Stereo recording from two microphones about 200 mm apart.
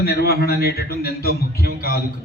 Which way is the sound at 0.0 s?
50° left (ahead or behind).